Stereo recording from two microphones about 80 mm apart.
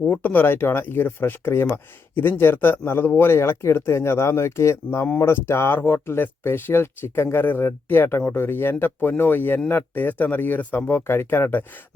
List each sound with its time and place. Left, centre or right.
0.0 s speech: centre